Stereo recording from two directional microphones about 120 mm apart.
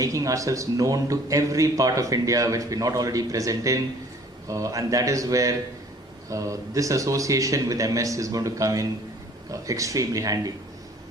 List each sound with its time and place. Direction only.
0.0 s a man's voice: 30° right (ahead or behind)